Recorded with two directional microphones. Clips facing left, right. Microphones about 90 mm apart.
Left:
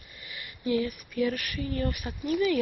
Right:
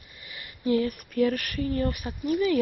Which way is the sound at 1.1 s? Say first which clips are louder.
Right 4 dB; 40° right (ahead or behind).